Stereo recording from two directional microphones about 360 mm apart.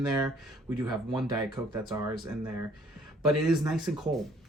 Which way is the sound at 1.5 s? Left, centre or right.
Centre.